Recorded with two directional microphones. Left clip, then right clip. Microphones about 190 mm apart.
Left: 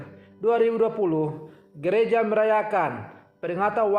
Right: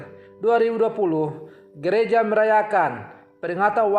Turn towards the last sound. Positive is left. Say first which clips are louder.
# right 3 dB
turn(degrees=-25)  # may be behind; listen again after turning